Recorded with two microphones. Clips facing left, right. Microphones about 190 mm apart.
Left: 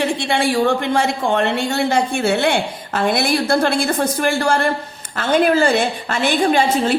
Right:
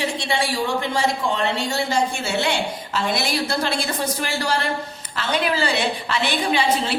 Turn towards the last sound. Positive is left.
turn(degrees=45)  # may be behind; listen again after turning